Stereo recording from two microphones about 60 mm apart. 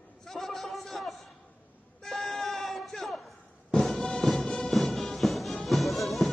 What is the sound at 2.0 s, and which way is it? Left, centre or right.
Music, centre.